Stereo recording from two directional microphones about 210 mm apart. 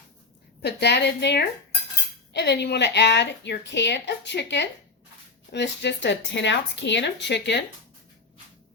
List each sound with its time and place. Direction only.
0.6 s a woman's voice: 55° left (ahead or behind)